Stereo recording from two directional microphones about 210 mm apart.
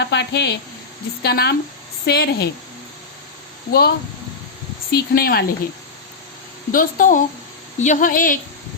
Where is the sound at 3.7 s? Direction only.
50° left (ahead or behind).